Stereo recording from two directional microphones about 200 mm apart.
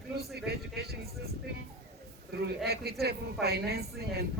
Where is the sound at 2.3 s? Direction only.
55° right (ahead or behind).